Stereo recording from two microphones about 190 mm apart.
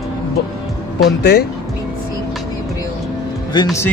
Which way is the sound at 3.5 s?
20° left (ahead or behind).